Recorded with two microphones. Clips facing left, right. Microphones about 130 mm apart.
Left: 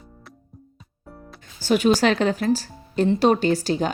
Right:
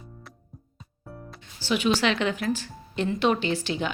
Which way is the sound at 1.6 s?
45° left (ahead or behind).